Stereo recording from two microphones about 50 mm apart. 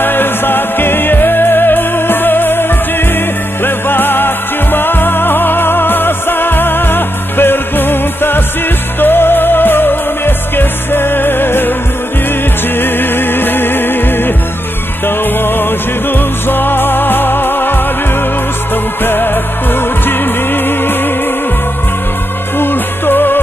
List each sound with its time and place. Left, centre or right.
0.0 s music: left
12.7 s music: left
19.0 s music: left
22.6 s music: left